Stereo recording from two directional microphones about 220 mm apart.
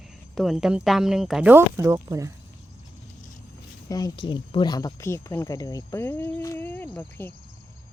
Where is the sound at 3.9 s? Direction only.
15° left (ahead or behind).